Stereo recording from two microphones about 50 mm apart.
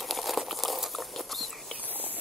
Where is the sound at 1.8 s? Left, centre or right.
Right.